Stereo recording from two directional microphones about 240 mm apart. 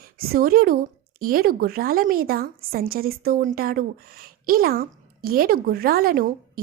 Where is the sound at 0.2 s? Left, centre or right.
Right.